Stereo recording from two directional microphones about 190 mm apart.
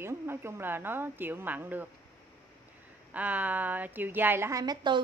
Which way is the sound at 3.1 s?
10° right (ahead or behind).